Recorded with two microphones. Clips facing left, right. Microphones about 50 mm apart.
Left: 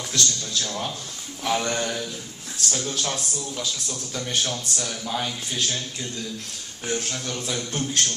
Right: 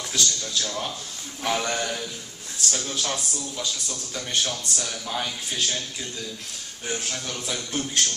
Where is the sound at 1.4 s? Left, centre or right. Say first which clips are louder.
Left 1 dB; centre.